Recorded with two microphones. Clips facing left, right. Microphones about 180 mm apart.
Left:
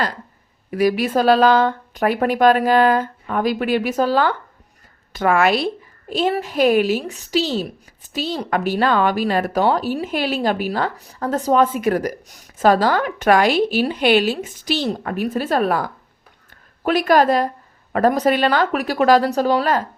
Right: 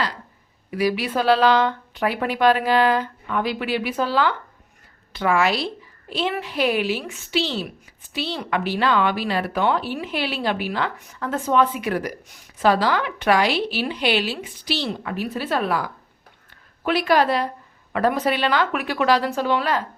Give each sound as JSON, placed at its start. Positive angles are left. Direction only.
{"t": 0.7, "sound": "a woman's voice", "side_deg": 45}
{"t": 6.1, "sound": "a woman's voice", "side_deg": 45}